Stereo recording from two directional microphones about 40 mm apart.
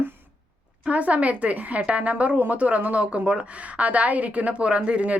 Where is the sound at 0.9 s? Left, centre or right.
Right.